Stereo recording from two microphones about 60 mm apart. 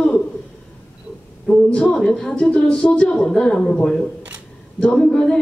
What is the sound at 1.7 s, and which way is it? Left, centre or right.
A woman's voice, centre.